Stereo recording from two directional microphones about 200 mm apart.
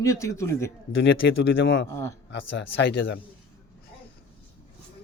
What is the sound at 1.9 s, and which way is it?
Speech, 15° left (ahead or behind).